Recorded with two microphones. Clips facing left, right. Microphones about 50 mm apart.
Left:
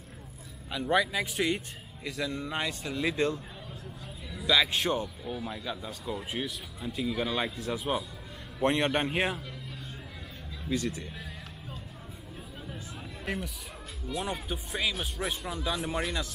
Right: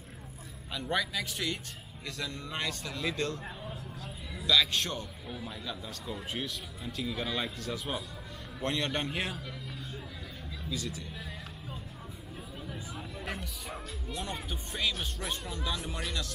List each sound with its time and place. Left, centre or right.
0.7 s a man's voice: centre
4.5 s a man's voice: left
8.6 s a man's voice: left
10.7 s speech: left
13.2 s music: centre
14.1 s a man's voice: centre